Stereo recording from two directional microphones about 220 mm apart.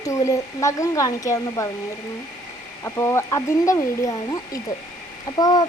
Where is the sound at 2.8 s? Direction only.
15° left (ahead or behind).